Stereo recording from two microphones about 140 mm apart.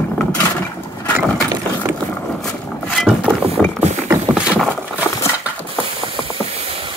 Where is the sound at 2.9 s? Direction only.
Centre (ahead or behind).